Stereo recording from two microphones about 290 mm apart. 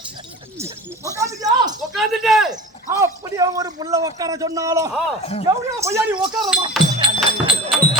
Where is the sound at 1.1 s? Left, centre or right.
Centre.